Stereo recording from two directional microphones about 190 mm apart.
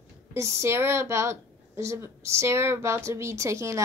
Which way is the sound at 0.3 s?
15° right (ahead or behind).